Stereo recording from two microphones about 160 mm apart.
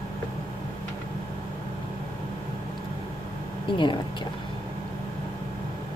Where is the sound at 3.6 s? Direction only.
30° left (ahead or behind).